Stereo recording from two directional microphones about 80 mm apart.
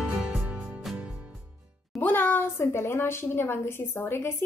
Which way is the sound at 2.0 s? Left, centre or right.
Left.